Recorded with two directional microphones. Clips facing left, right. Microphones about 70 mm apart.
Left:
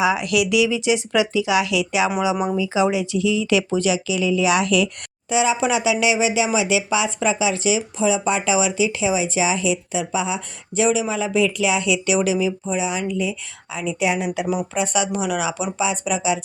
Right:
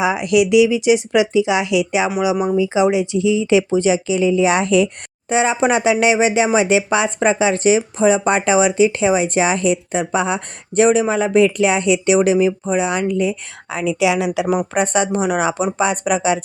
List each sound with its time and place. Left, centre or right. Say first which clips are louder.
0.0 s speech: right 4 dB; right
14.0 s speech: right 4 dB; right
14.9 s speech: right 4 dB; right
15.8 s speech: right 4 dB; right